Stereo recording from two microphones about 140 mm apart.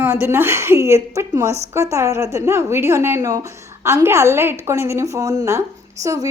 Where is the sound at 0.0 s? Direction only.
15° right (ahead or behind).